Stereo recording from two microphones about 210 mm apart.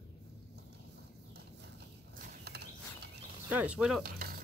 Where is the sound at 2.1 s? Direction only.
50° right (ahead or behind).